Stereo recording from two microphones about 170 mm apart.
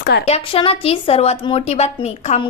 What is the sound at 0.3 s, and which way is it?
A woman's voice, 35° left (ahead or behind).